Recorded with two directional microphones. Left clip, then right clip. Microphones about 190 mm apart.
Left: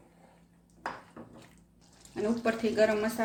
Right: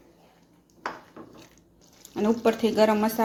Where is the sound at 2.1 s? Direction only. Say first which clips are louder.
Right 7 dB; 35° right (ahead or behind).